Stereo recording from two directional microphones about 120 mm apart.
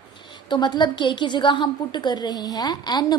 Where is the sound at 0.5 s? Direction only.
40° left (ahead or behind).